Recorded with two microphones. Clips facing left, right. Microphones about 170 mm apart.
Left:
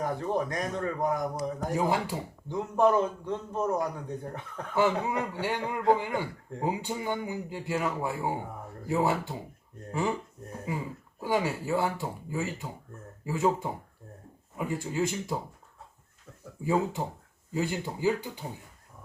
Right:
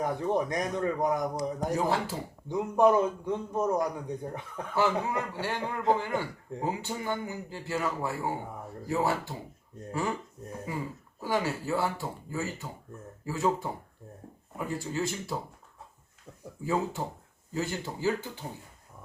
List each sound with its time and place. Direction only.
0.0 s a man's voice: 15° right (ahead or behind)
1.8 s speech: 15° left (ahead or behind)
2.5 s a man's voice: 15° right (ahead or behind)
4.7 s speech: 20° left (ahead or behind)
11.2 s speech: 15° left (ahead or behind)
16.6 s speech: 15° left (ahead or behind)